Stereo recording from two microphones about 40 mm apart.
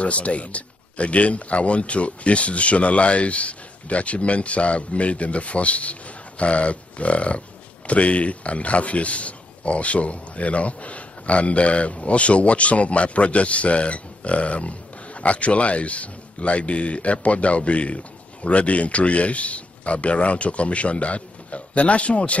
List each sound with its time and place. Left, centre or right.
0.0 s speech: left